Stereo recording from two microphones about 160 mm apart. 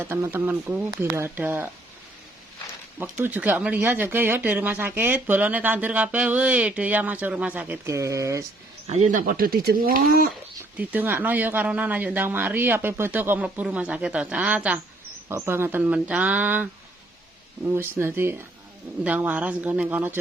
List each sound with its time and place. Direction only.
0.0 s speech: 15° right (ahead or behind)
3.0 s speech: 10° right (ahead or behind)
8.9 s speech: 50° right (ahead or behind); by 10.2 s 65° right (ahead or behind)
10.6 s speech: 10° right (ahead or behind)